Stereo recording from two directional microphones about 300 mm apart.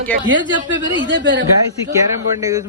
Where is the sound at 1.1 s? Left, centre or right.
Right.